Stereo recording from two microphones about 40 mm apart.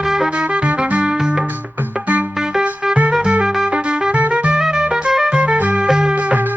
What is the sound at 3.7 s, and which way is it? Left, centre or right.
Music, right.